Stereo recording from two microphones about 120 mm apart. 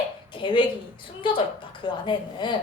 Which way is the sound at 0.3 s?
45° left (ahead or behind).